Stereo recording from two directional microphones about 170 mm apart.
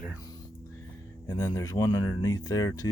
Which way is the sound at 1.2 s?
20° left (ahead or behind).